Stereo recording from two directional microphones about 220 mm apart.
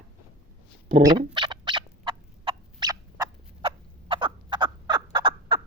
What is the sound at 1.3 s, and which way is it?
Turkey, 20° right (ahead or behind).